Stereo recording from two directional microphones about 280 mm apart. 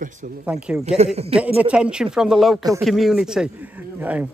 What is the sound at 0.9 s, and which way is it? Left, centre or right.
Speech, right.